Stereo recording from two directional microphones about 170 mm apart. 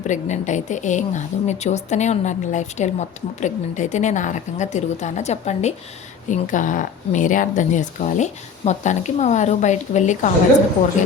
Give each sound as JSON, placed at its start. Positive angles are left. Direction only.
{"t": 0.1, "sound": "a woman's voice", "side_deg": 45}